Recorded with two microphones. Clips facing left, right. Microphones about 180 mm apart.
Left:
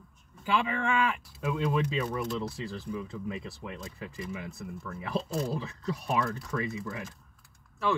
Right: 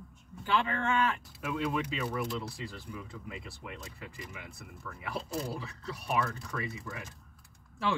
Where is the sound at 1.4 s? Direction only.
25° left (ahead or behind).